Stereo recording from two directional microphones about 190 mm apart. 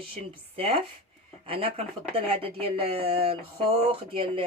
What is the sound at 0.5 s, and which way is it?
Speech, 30° right (ahead or behind).